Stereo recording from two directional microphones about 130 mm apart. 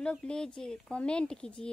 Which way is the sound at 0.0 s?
10° left (ahead or behind).